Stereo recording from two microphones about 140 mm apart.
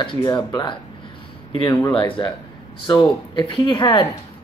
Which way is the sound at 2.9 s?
35° left (ahead or behind).